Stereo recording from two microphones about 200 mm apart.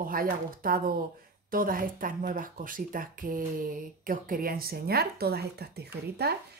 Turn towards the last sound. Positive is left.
turn(degrees=-55)  # may be behind; listen again after turning